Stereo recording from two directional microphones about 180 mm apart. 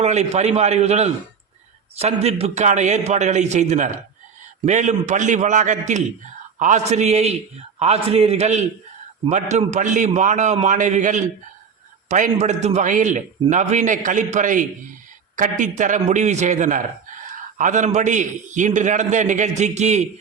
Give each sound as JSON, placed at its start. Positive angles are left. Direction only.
{"t": 0.0, "sound": "a man's voice", "side_deg": -40}